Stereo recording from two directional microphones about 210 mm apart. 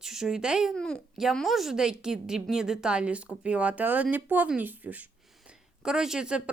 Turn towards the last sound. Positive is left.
turn(degrees=-5)  # may be behind; listen again after turning